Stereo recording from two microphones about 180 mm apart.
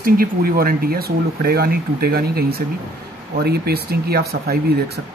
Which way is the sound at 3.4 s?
60° right (ahead or behind).